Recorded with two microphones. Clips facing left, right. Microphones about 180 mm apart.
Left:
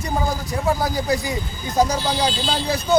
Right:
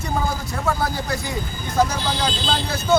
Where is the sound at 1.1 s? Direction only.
15° left (ahead or behind).